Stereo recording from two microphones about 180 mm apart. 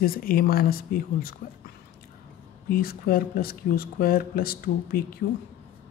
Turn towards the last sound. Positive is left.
turn(degrees=55)  # may be behind; listen again after turning